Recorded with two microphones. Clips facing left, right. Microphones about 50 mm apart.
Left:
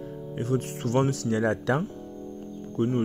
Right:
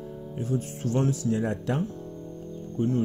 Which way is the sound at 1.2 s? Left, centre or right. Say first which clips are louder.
Left 2 dB; left.